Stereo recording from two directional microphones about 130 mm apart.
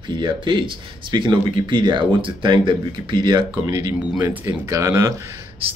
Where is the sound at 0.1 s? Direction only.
40° right (ahead or behind).